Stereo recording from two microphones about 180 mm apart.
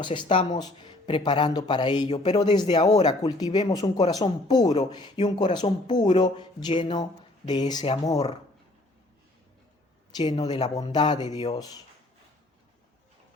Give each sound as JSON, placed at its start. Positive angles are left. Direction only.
{"t": 0.0, "sound": "speech", "side_deg": 25}
{"t": 10.2, "sound": "speech", "side_deg": 20}